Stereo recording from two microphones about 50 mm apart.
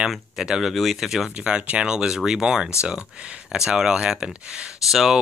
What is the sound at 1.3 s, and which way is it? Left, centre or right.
Speech, right.